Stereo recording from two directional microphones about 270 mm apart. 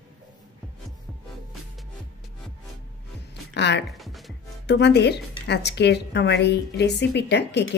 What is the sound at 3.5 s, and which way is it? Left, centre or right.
Speech, left.